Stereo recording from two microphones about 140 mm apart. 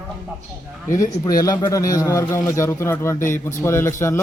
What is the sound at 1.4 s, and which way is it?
A man's voice, 25° left (ahead or behind).